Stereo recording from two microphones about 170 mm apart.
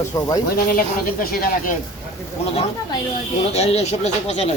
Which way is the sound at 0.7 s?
60° left (ahead or behind).